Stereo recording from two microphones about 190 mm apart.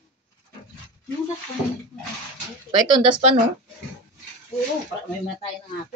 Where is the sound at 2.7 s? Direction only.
25° right (ahead or behind).